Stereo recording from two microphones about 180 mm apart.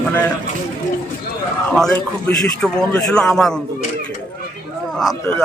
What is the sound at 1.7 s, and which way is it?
Speech, 5° left (ahead or behind).